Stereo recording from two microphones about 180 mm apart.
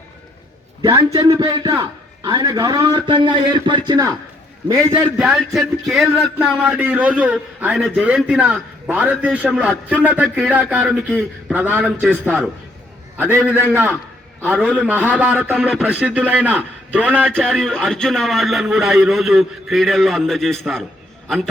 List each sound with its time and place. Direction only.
0.8 s a man's voice: 20° right (ahead or behind)
4.9 s speech: 5° right (ahead or behind)
10.2 s a man's voice: centre (ahead or behind)
10.5 s speech: 10° right (ahead or behind)
17.2 s a man's voice: 5° left (ahead or behind)